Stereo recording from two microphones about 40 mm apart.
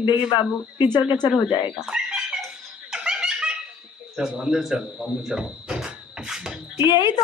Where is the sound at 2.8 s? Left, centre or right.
Centre.